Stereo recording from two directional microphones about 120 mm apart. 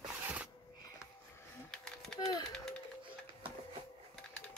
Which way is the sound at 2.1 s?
5° left (ahead or behind).